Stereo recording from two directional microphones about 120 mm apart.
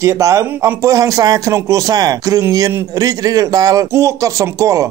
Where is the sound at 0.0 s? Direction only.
25° right (ahead or behind).